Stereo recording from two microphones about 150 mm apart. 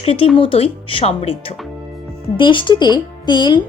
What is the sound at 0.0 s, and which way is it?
A woman's voice, 40° left (ahead or behind).